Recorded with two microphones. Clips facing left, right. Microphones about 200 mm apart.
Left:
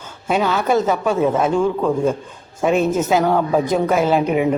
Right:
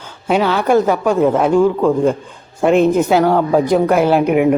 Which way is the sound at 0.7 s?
15° right (ahead or behind).